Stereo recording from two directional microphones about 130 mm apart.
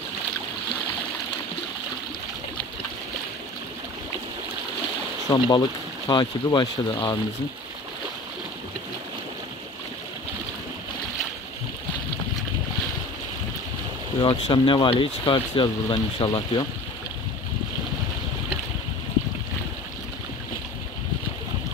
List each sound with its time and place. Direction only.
5.3 s speech: 35° left (ahead or behind)
14.2 s speech: 40° left (ahead or behind)